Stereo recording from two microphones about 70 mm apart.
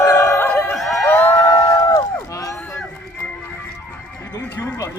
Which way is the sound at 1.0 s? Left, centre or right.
Left.